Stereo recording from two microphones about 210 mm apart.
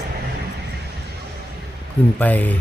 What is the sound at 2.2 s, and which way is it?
Speech, 10° left (ahead or behind).